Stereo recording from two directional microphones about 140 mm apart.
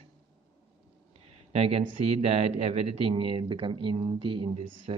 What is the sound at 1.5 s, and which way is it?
Speech, 45° right (ahead or behind).